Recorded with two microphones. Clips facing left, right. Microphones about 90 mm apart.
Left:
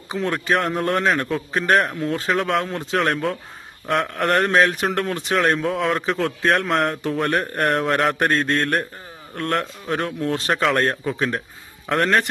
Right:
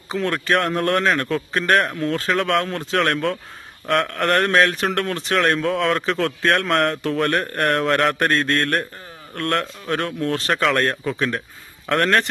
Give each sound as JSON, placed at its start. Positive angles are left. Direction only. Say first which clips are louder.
{"t": 0.1, "sound": "speech", "louder": "right 1 dB", "side_deg": 15}
{"t": 0.5, "sound": "a man's voice", "louder": "right 1 dB", "side_deg": 5}
{"t": 2.3, "sound": "speech", "louder": "right 1 dB", "side_deg": 5}
{"t": 4.9, "sound": "a man's voice", "louder": "even", "side_deg": 5}
{"t": 5.1, "sound": "speech", "louder": "even", "side_deg": 20}
{"t": 5.5, "sound": "a man's voice", "louder": "right 1 dB", "side_deg": 5}
{"t": 10.5, "sound": "speech", "louder": "even", "side_deg": 5}
{"t": 11.2, "sound": "speech", "louder": "even", "side_deg": 25}
{"t": 11.9, "sound": "a man's voice", "louder": "right 1 dB", "side_deg": 5}